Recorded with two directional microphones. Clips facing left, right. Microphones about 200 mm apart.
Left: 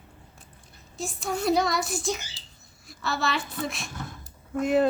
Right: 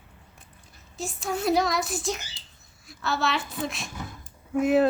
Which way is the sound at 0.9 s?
Centre (ahead or behind).